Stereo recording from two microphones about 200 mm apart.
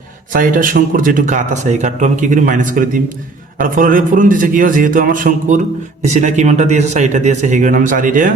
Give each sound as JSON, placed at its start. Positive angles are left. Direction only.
{"t": 0.3, "sound": "a man's voice", "side_deg": -45}